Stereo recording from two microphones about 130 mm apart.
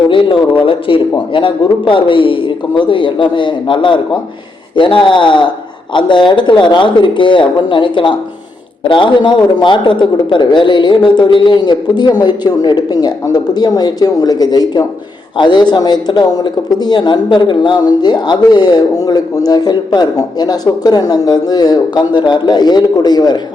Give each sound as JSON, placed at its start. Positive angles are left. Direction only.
{"t": 0.1, "sound": "speech", "side_deg": 40}